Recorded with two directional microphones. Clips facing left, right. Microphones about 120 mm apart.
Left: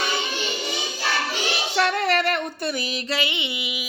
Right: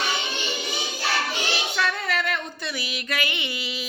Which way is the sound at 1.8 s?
60° left (ahead or behind).